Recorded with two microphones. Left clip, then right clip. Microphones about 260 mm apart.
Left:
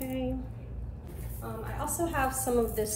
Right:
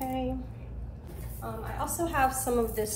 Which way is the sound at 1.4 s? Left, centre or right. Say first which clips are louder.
Right 2 dB; centre.